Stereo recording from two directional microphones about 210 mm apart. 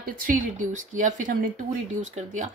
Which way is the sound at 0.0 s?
40° right (ahead or behind).